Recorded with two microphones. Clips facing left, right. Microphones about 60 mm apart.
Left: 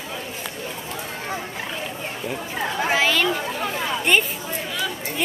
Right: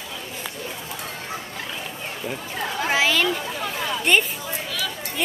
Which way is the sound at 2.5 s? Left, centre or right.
Centre.